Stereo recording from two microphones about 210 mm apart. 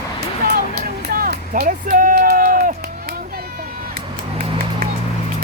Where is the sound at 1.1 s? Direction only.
45° right (ahead or behind).